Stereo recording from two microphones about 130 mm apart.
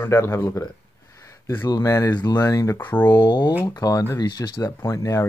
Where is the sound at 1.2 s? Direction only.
20° left (ahead or behind).